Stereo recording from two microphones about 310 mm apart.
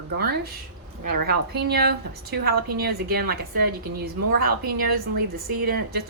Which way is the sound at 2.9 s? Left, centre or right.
Right.